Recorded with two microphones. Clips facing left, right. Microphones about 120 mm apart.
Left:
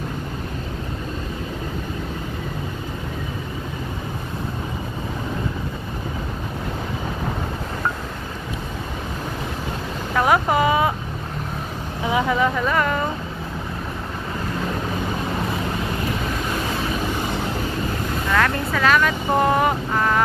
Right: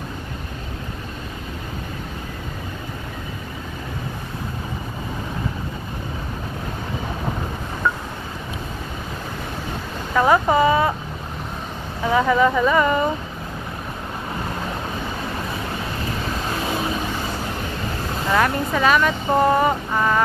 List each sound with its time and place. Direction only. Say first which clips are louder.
10.2 s a sound: right 2 dB; 10° left (ahead or behind)
12.1 s speech: right 3 dB; 5° left (ahead or behind)
18.3 s vehicle: right 2 dB; 15° right (ahead or behind)
18.8 s speech: even; 5° right (ahead or behind)
19.5 s boat: right 1 dB; centre (ahead or behind)